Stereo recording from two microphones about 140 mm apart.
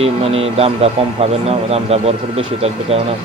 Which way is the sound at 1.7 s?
45° right (ahead or behind).